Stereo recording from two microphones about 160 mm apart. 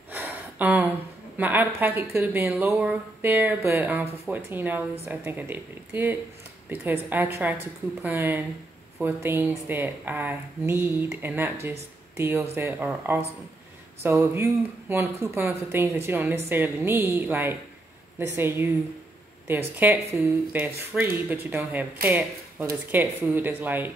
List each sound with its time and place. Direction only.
0.1 s gasp: 10° right (ahead or behind)
1.4 s speech: 10° right (ahead or behind)